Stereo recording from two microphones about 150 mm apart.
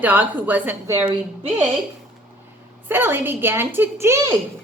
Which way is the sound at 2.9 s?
15° right (ahead or behind).